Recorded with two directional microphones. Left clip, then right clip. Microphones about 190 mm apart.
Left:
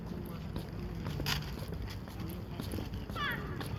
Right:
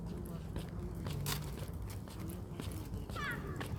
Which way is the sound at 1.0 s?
10° right (ahead or behind).